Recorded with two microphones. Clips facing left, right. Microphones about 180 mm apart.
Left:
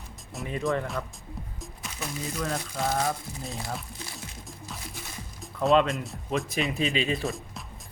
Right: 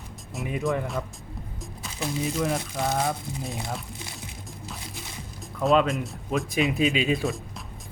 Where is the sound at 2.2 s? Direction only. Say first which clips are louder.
Right 4 dB; 15° right (ahead or behind).